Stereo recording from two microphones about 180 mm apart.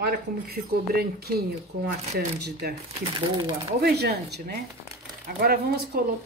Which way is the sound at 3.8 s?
60° right (ahead or behind).